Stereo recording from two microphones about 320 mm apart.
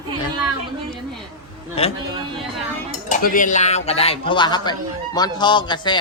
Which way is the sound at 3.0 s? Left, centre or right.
Left.